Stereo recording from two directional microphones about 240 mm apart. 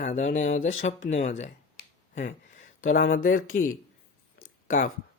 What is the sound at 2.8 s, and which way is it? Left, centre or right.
Speech, left.